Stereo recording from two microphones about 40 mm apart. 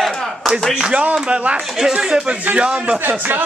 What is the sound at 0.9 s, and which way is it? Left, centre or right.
Speech, right.